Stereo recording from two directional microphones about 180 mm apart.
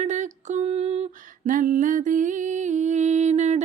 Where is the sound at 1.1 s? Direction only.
50° right (ahead or behind).